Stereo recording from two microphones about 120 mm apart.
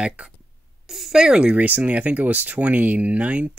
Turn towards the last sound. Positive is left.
turn(degrees=-10)  # may be behind; listen again after turning